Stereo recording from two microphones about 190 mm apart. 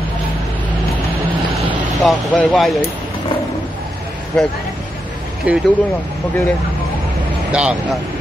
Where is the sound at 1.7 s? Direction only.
Centre (ahead or behind).